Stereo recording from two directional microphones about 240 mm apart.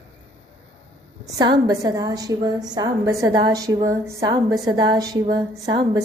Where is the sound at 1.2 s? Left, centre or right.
Centre.